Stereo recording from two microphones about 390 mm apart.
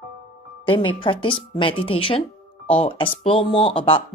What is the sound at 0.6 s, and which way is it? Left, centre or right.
A woman's voice, centre.